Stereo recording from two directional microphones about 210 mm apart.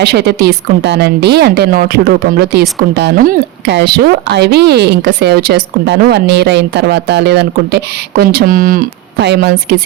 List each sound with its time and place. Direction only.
0.0 s a woman's voice: 50° right (ahead or behind)